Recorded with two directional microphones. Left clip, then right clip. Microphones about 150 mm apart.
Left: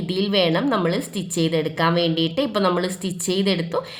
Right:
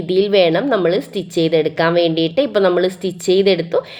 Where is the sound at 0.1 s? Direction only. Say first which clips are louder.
Right 7 dB; 35° right (ahead or behind).